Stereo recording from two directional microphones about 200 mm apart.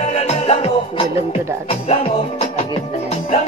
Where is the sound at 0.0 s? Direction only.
30° left (ahead or behind).